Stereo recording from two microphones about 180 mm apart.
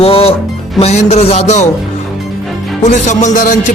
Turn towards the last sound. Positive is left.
turn(degrees=50)  # may be behind; listen again after turning